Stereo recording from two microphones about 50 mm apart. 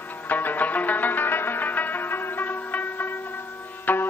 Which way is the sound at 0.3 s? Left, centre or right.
Left.